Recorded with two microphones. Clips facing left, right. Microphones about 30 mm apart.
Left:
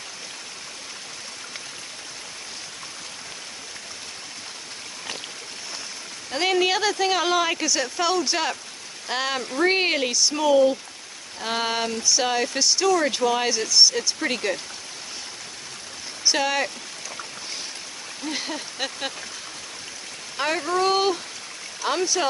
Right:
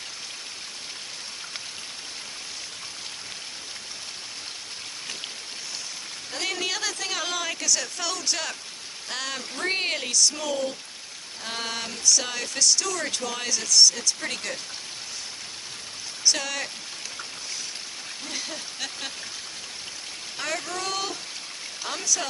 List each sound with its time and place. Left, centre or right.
6.3 s speech: left
16.3 s speech: left
18.2 s speech: left
20.3 s speech: left